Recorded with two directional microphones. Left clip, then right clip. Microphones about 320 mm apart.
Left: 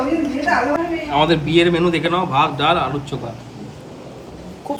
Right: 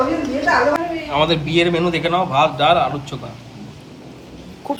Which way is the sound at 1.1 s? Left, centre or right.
Centre.